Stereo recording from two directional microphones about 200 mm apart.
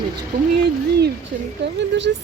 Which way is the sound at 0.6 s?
55° right (ahead or behind).